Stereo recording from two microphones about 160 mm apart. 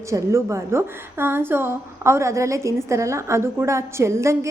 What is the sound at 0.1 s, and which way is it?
A woman's voice, 20° right (ahead or behind).